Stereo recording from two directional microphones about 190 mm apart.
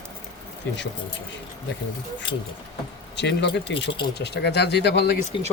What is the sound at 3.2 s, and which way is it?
Speech, 65° left (ahead or behind).